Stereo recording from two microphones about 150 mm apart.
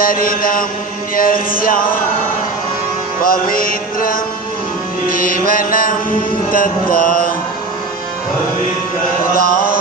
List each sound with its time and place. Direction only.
0.0 s mantra: 70° left (ahead or behind)
3.2 s mantra: 70° left (ahead or behind)
9.2 s mantra: 70° left (ahead or behind)